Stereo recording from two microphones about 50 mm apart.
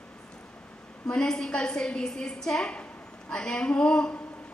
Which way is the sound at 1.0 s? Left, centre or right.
Centre.